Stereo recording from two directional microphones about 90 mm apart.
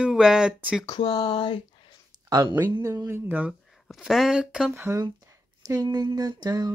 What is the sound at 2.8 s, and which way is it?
Speech, 35° right (ahead or behind).